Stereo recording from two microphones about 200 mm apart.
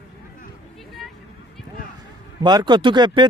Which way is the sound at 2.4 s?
20° right (ahead or behind).